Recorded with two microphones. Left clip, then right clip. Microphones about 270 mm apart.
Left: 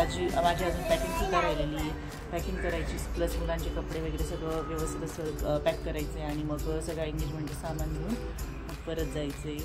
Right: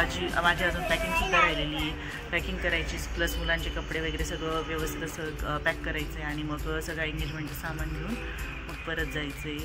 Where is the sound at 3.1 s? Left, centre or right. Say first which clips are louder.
Right 3 dB; right.